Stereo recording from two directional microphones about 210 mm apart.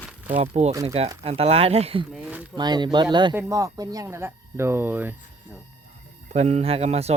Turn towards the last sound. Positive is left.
turn(degrees=-30)  # may be behind; listen again after turning